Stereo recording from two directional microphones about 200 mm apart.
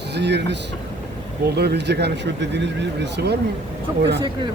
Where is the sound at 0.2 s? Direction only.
60° right (ahead or behind).